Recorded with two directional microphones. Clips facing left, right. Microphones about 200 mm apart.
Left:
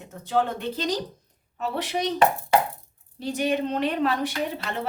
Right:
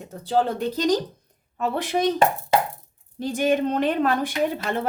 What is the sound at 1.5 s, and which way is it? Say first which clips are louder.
Speech: right 4 dB; 55° right (ahead or behind).